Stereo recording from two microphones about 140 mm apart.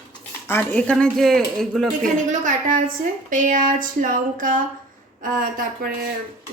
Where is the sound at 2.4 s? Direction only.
70° right (ahead or behind).